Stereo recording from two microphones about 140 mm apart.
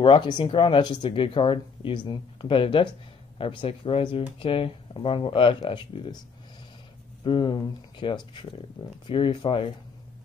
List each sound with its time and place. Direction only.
0.0 s speech: 35° left (ahead or behind)
7.2 s speech: 35° left (ahead or behind)